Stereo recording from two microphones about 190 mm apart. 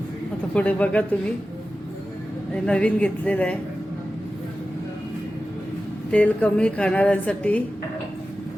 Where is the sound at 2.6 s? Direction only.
5° left (ahead or behind).